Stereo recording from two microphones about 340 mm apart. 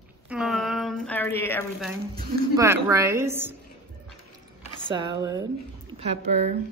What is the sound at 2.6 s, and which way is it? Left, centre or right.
Speech, centre.